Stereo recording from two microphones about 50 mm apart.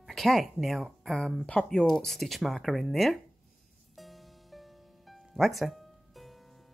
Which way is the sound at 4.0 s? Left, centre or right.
Centre.